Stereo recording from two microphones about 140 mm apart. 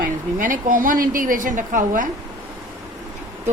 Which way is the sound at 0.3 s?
75° right (ahead or behind).